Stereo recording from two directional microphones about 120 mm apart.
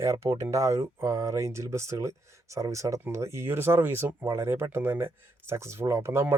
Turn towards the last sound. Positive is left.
turn(degrees=-20)  # may be behind; listen again after turning